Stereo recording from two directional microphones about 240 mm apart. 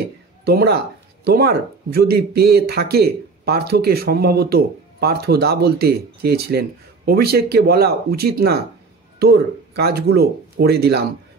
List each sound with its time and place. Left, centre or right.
0.5 s speech: right